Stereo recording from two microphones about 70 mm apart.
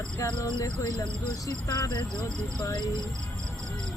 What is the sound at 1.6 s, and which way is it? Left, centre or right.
Speech, left.